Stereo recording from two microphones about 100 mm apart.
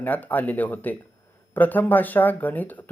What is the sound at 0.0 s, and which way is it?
Speech, 15° left (ahead or behind).